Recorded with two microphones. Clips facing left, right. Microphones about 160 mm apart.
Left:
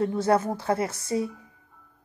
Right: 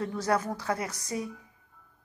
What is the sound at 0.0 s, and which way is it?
A woman's voice, 25° left (ahead or behind).